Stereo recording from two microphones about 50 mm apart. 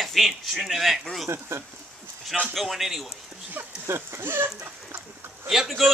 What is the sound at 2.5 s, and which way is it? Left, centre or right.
Speech, centre.